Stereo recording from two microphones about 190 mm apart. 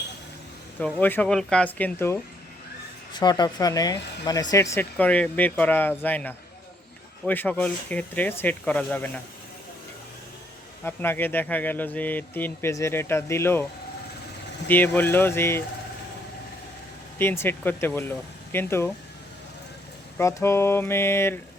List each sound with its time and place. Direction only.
0.8 s speech: 5° left (ahead or behind)
3.1 s speech: 25° left (ahead or behind)
10.8 s speech: 10° left (ahead or behind)
14.7 s speech: 10° left (ahead or behind)
17.2 s speech: 10° left (ahead or behind)
20.1 s speech: 15° left (ahead or behind)